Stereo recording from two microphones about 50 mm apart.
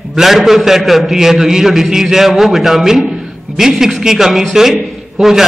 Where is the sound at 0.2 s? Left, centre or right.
Centre.